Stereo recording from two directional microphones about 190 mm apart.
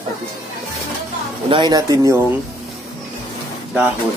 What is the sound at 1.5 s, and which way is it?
Speech, 20° right (ahead or behind).